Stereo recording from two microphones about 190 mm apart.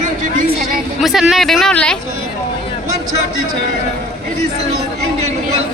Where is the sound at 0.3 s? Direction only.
50° right (ahead or behind).